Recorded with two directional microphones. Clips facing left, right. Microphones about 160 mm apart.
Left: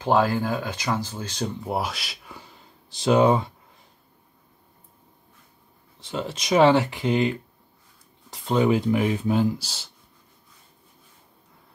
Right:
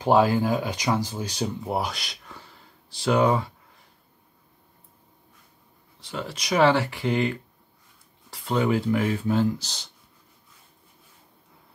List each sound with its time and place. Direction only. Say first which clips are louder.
0.0 s speech: right 2 dB; 10° right (ahead or behind); by 3.5 s 20° left (ahead or behind)
5.9 s speech: left 3 dB; 25° left (ahead or behind); by 9.8 s 10° left (ahead or behind)